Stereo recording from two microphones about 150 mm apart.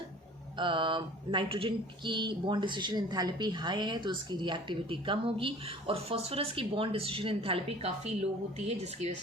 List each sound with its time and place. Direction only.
0.6 s speech: 30° right (ahead or behind)